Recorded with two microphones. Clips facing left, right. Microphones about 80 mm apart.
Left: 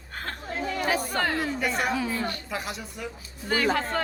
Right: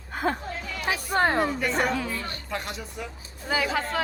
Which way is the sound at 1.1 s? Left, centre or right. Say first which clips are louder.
Right 4 dB; right.